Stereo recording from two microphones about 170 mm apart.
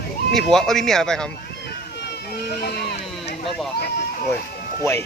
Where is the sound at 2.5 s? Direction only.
70° left (ahead or behind).